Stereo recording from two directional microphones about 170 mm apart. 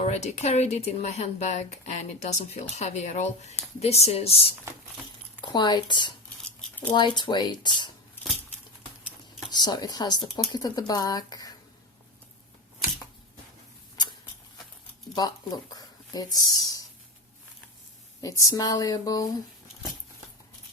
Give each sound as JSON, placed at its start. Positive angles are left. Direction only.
{"t": 0.0, "sound": "speech", "side_deg": 40}
{"t": 5.4, "sound": "speech", "side_deg": 25}
{"t": 9.5, "sound": "speech", "side_deg": 25}
{"t": 15.1, "sound": "speech", "side_deg": 20}
{"t": 18.2, "sound": "speech", "side_deg": 20}